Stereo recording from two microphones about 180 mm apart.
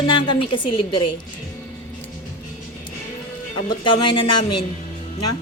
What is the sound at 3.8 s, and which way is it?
Speech, 25° left (ahead or behind).